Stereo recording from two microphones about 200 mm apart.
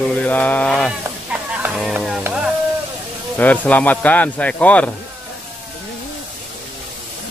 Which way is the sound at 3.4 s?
10° left (ahead or behind).